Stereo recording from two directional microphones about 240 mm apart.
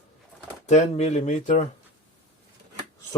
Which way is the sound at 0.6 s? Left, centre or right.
Left.